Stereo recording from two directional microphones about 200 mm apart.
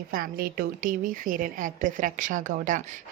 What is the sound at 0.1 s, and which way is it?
A woman's voice, 45° right (ahead or behind).